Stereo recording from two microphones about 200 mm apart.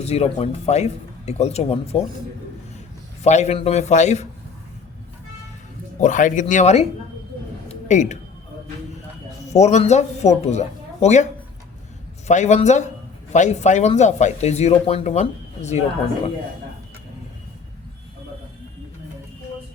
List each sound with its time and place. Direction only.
0.0 s speech: 30° left (ahead or behind)
3.2 s speech: 35° left (ahead or behind)
6.0 s speech: 40° left (ahead or behind)
7.7 s a sound: 35° left (ahead or behind)
9.5 s speech: 35° left (ahead or behind)
12.3 s speech: 35° left (ahead or behind)